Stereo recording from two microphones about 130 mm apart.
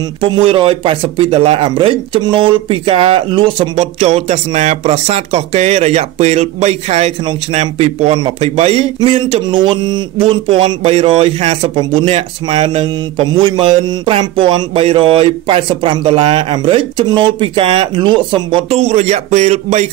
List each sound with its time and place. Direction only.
0.2 s speech: 45° right (ahead or behind)
3.7 s speech: 55° right (ahead or behind)